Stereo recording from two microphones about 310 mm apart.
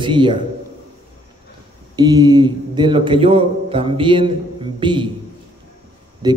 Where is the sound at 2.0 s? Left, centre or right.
Centre.